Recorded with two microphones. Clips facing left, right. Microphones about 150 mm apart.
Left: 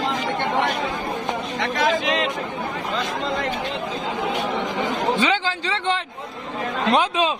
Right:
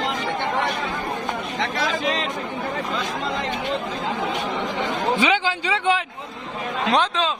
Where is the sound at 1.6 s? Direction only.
35° right (ahead or behind).